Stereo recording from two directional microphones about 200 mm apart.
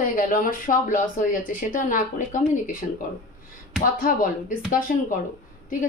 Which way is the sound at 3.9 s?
45° left (ahead or behind).